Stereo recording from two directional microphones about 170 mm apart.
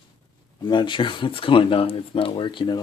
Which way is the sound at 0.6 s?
30° left (ahead or behind).